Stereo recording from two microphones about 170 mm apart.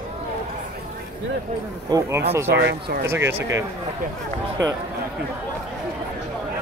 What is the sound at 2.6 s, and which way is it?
Speech, 75° right (ahead or behind).